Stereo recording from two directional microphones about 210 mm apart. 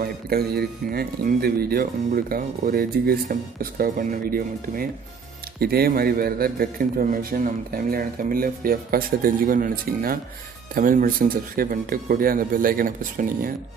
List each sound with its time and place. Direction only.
0.0 s speech: 45° right (ahead or behind)